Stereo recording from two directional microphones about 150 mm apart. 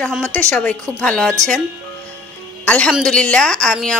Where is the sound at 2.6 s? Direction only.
10° left (ahead or behind).